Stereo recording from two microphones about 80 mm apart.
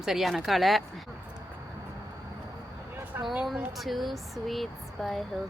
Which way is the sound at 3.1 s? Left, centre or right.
Right.